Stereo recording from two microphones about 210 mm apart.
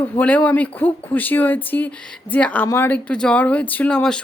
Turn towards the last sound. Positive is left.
turn(degrees=5)  # may be behind; listen again after turning